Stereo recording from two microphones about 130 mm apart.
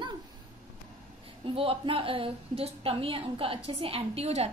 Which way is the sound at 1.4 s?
45° right (ahead or behind).